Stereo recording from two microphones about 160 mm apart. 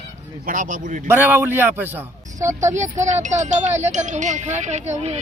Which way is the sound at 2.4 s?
50° right (ahead or behind).